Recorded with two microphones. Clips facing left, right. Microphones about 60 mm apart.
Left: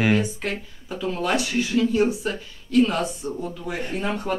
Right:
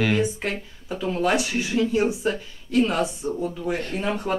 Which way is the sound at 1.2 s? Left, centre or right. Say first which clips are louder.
Right 1 dB; centre.